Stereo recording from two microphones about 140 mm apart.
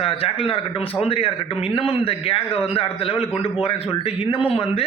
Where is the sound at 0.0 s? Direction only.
45° left (ahead or behind).